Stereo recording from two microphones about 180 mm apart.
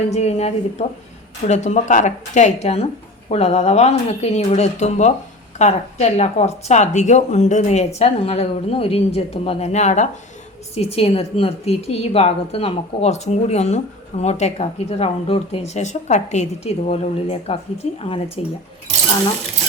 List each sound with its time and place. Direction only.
0.1 s a woman's voice: 35° left (ahead or behind)